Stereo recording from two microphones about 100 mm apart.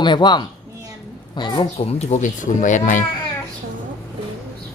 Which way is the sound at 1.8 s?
90° left.